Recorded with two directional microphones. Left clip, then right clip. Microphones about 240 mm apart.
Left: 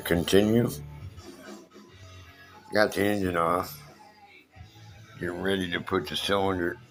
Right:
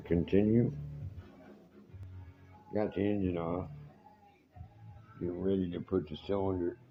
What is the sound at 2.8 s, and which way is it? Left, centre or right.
Speech, left.